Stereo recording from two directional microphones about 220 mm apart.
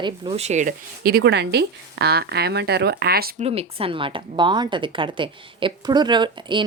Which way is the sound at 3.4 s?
25° right (ahead or behind).